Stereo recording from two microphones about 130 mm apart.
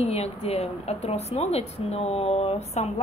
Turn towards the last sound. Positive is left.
turn(degrees=55)  # may be behind; listen again after turning